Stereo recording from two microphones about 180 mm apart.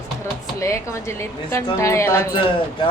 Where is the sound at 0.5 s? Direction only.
15° left (ahead or behind).